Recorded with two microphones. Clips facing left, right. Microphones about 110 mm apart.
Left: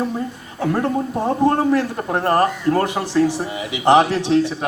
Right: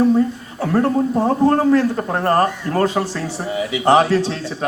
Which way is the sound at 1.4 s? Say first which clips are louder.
Right 2 dB; 15° left (ahead or behind).